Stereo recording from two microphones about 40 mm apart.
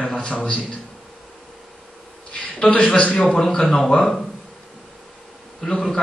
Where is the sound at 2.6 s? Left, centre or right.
Left.